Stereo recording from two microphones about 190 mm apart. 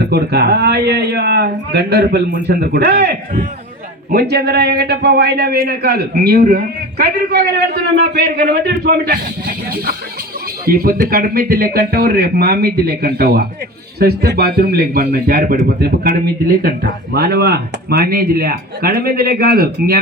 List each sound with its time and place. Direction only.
0.1 s a man's voice: 60° right (ahead or behind)
10.7 s a man's voice: 55° right (ahead or behind)